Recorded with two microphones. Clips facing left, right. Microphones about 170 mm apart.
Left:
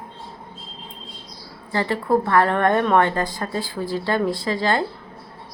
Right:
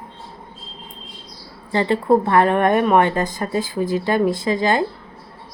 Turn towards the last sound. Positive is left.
turn(degrees=-20)  # may be behind; listen again after turning